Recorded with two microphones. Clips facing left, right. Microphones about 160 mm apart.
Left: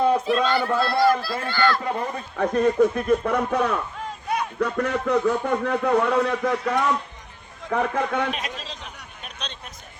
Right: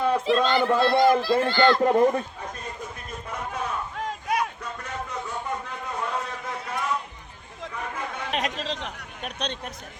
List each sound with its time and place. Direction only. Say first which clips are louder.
0.4 s a man's voice: right 1 dB; 20° right (ahead or behind)
1.8 s speech: right 8 dB; 45° right (ahead or behind)
2.4 s a man's voice: left 17 dB; 70° left (ahead or behind)
8.4 s speech: right 5 dB; 80° right; by 9.6 s 65° right (ahead or behind)